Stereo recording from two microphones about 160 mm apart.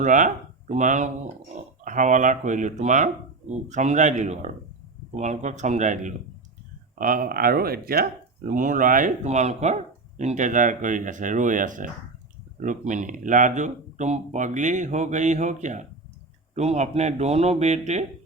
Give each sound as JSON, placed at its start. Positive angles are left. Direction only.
{"t": 0.0, "sound": "speech", "side_deg": -55}